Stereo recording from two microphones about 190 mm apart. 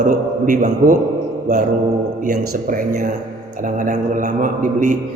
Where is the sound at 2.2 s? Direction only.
45° right (ahead or behind).